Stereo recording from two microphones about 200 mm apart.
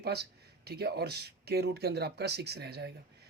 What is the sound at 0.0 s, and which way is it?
Speech, 55° right (ahead or behind).